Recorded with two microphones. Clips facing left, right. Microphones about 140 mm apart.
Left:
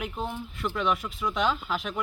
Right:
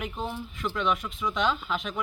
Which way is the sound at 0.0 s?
Centre (ahead or behind).